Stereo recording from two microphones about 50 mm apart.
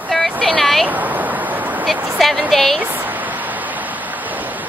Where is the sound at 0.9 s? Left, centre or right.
Right.